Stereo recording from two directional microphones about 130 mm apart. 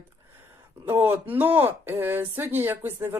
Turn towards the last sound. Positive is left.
turn(degrees=-15)  # may be behind; listen again after turning